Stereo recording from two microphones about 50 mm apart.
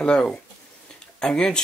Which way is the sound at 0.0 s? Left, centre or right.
Centre.